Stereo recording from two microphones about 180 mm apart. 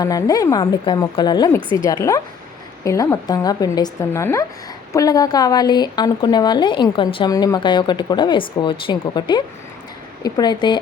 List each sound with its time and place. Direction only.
0.0 s a woman's voice: 20° left (ahead or behind)